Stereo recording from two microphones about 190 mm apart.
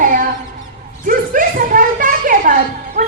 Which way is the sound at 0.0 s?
45° right (ahead or behind).